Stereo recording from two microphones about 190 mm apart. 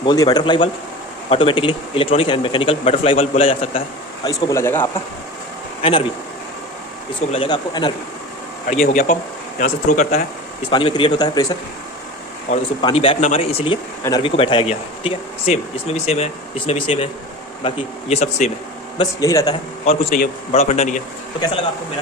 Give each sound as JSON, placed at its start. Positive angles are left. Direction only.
{"t": 0.0, "sound": "a man's voice", "side_deg": 20}
{"t": 4.3, "sound": "speech", "side_deg": 15}
{"t": 7.3, "sound": "a man's voice", "side_deg": 30}
{"t": 8.7, "sound": "speech", "side_deg": 40}
{"t": 10.7, "sound": "a man's voice", "side_deg": 25}
{"t": 12.5, "sound": "speech", "side_deg": 40}
{"t": 12.8, "sound": "speech", "side_deg": 30}
{"t": 18.9, "sound": "speech", "side_deg": 15}
{"t": 19.8, "sound": "speech", "side_deg": 30}